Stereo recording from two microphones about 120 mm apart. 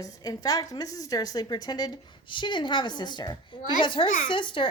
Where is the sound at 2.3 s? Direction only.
40° left (ahead or behind).